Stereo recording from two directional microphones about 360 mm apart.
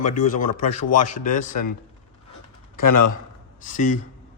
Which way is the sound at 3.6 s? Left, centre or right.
Left.